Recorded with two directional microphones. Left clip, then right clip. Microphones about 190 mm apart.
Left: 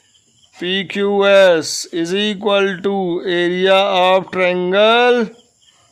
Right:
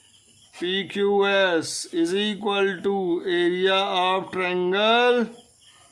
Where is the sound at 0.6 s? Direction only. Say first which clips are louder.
Left 6 dB; 40° left (ahead or behind).